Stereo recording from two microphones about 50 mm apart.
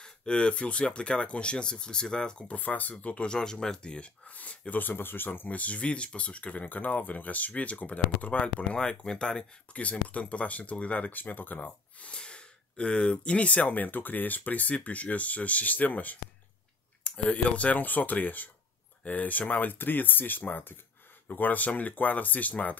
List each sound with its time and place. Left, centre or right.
0.0 s speech: centre
2.5 s speech: left
5.5 s speech: left